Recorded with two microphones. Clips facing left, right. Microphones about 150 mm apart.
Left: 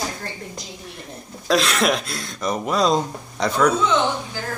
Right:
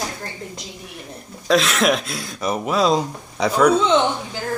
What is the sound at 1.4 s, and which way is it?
Speech, centre (ahead or behind).